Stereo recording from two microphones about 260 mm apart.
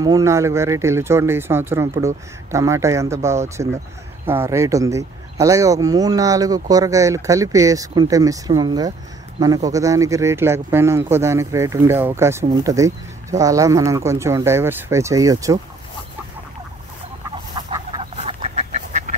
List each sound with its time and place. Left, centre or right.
0.0 s speech: centre
17.6 s duck: centre